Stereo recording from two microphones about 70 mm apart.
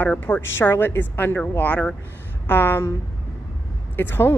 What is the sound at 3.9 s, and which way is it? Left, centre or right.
Speech, left.